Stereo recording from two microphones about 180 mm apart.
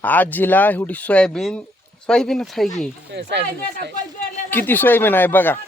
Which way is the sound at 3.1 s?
70° right (ahead or behind).